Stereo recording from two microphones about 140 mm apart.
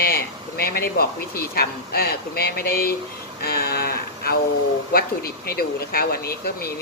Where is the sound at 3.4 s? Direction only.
90° left.